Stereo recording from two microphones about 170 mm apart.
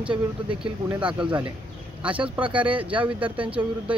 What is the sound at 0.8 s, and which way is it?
Speech, 10° right (ahead or behind).